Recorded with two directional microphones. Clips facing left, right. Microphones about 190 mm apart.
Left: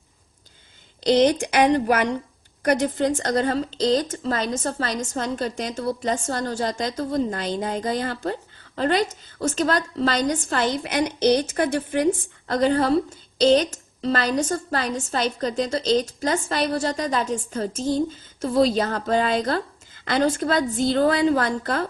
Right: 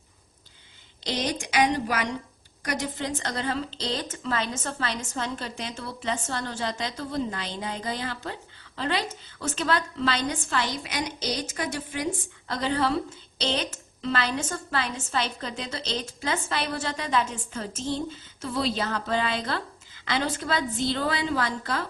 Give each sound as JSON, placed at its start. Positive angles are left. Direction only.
{"t": 1.1, "sound": "a woman's voice", "side_deg": 60}